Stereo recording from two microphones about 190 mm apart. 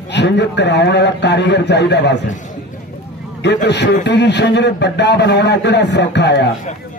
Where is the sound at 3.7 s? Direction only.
65° left (ahead or behind).